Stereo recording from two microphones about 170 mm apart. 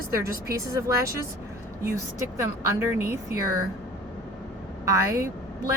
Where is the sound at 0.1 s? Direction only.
15° right (ahead or behind).